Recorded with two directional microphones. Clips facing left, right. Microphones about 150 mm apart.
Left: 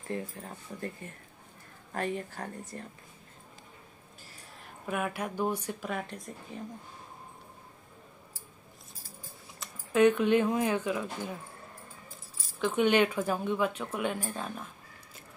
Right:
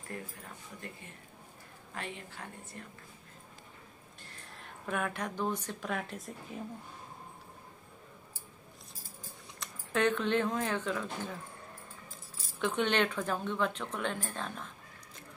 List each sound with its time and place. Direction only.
0.1 s speech: 30° left (ahead or behind)
2.0 s speech: 45° left (ahead or behind)
4.2 s speech: 5° left (ahead or behind)
9.6 s speech: 10° left (ahead or behind)
12.5 s speech: 5° left (ahead or behind)